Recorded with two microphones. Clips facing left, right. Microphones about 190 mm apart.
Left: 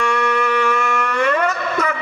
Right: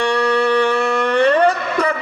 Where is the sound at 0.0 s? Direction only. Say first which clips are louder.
Right 3 dB; 35° right (ahead or behind).